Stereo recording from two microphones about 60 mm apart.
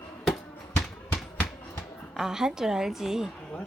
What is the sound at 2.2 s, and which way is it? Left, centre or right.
A woman's voice, centre.